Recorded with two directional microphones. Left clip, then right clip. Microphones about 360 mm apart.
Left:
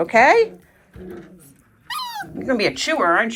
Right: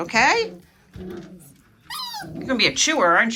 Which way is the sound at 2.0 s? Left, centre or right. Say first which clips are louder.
Left 1 dB; centre.